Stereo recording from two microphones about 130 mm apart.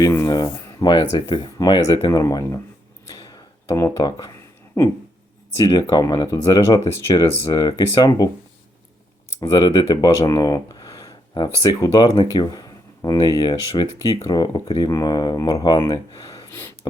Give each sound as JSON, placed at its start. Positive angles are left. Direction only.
{"t": 0.0, "sound": "speech", "side_deg": 25}
{"t": 0.3, "sound": "speech", "side_deg": 35}
{"t": 3.1, "sound": "a sound", "side_deg": 25}
{"t": 4.8, "sound": "speech", "side_deg": 25}
{"t": 9.4, "sound": "speech", "side_deg": 30}